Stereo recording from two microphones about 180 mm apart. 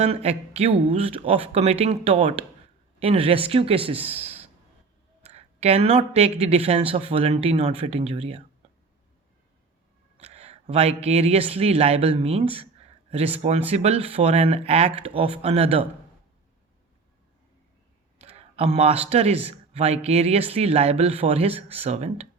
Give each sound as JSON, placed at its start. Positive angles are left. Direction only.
{"t": 0.0, "sound": "speech", "side_deg": -35}
{"t": 10.2, "sound": "speech", "side_deg": -35}
{"t": 18.2, "sound": "speech", "side_deg": -35}